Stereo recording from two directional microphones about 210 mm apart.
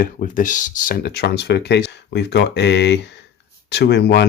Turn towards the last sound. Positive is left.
turn(degrees=55)  # may be behind; listen again after turning